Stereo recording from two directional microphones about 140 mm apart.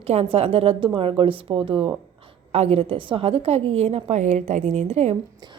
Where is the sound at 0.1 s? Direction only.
45° right (ahead or behind).